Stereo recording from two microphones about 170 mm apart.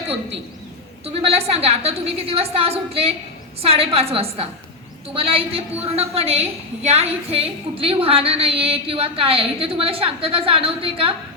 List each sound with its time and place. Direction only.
1.0 s a woman's voice: 35° right (ahead or behind)